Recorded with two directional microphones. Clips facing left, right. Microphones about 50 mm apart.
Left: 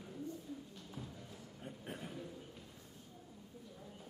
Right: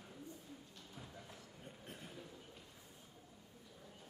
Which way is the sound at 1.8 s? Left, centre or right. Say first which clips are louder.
Left 7 dB; left.